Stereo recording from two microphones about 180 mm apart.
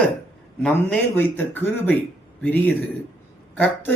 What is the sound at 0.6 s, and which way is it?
Speech, 10° left (ahead or behind).